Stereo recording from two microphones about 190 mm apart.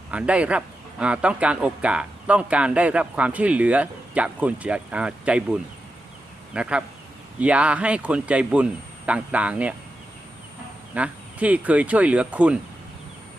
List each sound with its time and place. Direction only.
0.1 s speech: 5° right (ahead or behind)
10.9 s speech: 5° right (ahead or behind)